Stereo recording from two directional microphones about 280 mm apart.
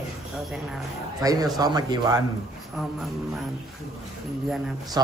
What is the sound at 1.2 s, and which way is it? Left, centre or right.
Speech, centre.